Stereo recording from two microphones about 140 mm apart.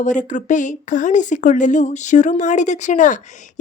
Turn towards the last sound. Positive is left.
turn(degrees=65)  # may be behind; listen again after turning